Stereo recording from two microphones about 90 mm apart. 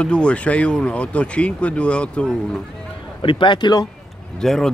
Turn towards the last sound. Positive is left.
turn(degrees=5)  # may be behind; listen again after turning